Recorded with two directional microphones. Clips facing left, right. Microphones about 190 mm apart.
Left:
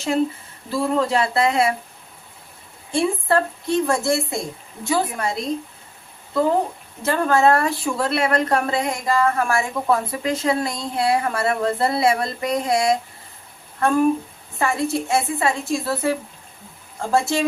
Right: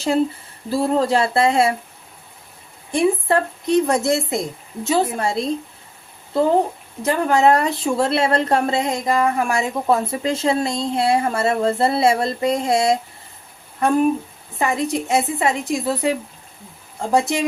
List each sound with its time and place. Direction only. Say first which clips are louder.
0.7 s speech: right 2 dB; 35° right (ahead or behind)
2.9 s speech: right 2 dB; 15° right (ahead or behind)
7.0 s a woman's voice: right 1 dB; 15° right (ahead or behind)